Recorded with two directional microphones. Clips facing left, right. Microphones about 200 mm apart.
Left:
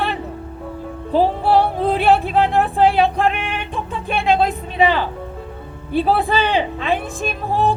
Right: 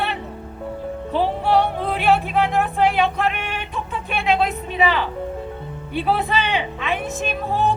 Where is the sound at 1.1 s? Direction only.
35° left (ahead or behind).